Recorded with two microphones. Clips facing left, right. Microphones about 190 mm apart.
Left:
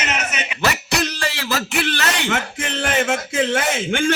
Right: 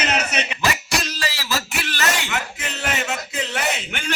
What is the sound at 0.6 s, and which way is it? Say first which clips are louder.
Speech: left 6 dB; 65° left (ahead or behind).